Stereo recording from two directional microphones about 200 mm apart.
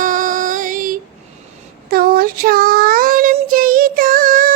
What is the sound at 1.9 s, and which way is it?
Child singing, 50° right (ahead or behind).